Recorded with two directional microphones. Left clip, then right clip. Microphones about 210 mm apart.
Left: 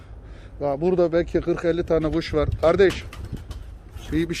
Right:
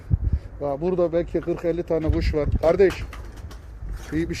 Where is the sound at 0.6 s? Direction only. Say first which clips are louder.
Left 2 dB; 30° left (ahead or behind).